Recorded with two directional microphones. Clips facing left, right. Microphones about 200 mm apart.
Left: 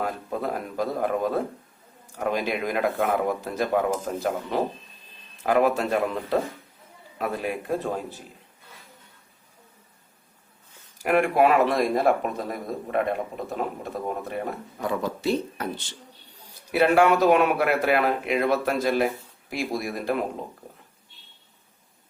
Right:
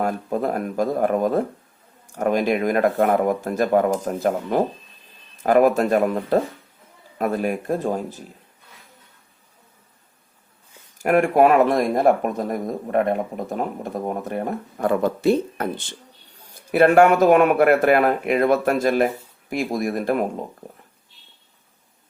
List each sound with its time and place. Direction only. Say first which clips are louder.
0.0 s speech: right 6 dB; 45° right (ahead or behind)
10.9 s speech: right 4 dB; 45° right (ahead or behind)